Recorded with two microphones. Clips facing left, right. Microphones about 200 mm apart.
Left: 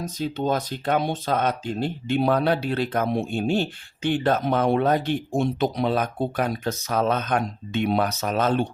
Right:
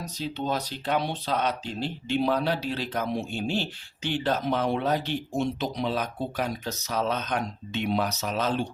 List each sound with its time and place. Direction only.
0.0 s speech: 50° left (ahead or behind)